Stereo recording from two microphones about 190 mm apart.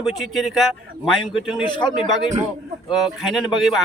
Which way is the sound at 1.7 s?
25° left (ahead or behind).